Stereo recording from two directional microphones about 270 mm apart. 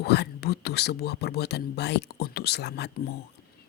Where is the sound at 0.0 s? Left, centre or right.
Left.